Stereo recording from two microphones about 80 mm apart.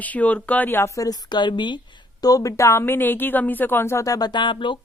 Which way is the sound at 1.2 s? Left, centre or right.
Left.